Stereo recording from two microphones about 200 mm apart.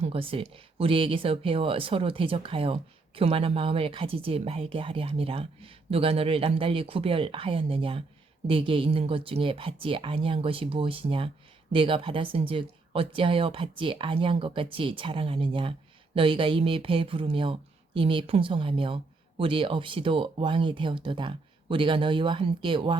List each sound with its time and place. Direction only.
0.0 s a woman's voice: 30° right (ahead or behind)